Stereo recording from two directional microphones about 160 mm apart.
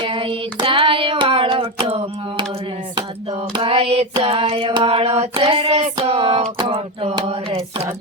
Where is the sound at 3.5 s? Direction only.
40° right (ahead or behind).